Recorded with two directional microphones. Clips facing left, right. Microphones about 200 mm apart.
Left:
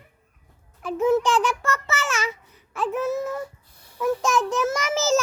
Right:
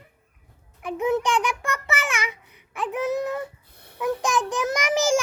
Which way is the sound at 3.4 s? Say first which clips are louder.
Even; 60° right (ahead or behind).